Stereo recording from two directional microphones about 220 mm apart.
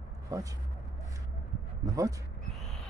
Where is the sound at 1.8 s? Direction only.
15° right (ahead or behind).